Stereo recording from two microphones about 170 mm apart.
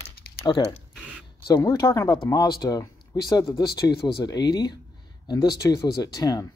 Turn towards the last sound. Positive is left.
turn(degrees=20)  # may be behind; listen again after turning